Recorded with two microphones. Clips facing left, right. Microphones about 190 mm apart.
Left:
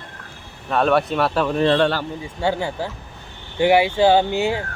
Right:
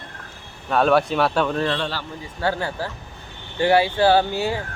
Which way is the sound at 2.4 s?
15° left (ahead or behind).